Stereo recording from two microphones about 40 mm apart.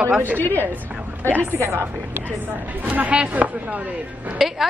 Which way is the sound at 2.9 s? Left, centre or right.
Right.